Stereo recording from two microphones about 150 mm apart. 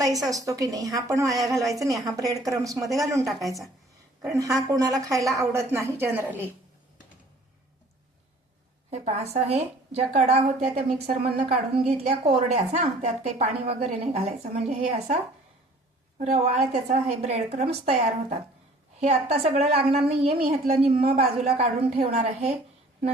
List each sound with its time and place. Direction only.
0.3 s a woman's voice: 25° right (ahead or behind)
8.9 s a woman's voice: 50° right (ahead or behind)